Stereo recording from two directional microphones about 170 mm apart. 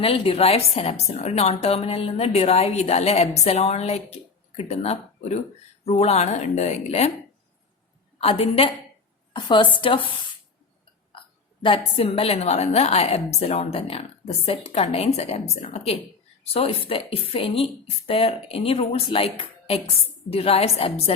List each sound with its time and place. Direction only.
0.0 s a woman's voice: 35° left (ahead or behind)
8.2 s a woman's voice: 35° left (ahead or behind)
11.6 s a woman's voice: 30° left (ahead or behind)